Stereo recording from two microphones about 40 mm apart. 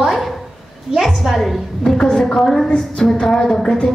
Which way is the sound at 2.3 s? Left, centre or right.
Centre.